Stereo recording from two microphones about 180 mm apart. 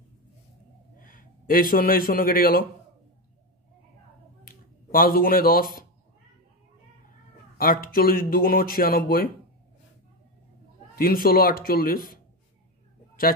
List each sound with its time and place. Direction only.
0.9 s a man's voice: 50° left (ahead or behind)
4.5 s speech: 55° left (ahead or behind)
7.5 s speech: 55° left (ahead or behind)
11.0 s speech: 55° left (ahead or behind)